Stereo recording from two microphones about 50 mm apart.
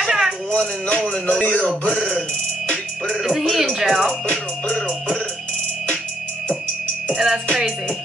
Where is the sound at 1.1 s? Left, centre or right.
Centre.